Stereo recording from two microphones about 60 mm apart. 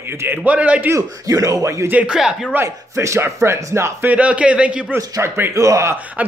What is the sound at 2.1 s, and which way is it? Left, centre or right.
Speech, centre.